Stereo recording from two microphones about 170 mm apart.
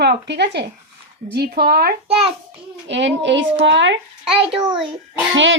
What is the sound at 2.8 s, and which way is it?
Speech, 90° right.